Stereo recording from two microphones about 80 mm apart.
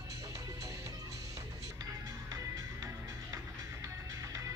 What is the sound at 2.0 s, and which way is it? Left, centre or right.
Music, right.